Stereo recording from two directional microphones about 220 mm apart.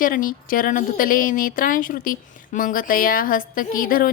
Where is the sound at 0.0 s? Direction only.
40° left (ahead or behind).